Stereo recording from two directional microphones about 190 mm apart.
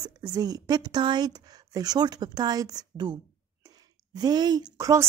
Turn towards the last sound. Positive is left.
turn(degrees=-15)  # may be behind; listen again after turning